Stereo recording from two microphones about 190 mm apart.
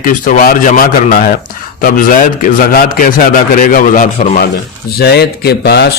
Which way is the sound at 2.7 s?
45° left (ahead or behind).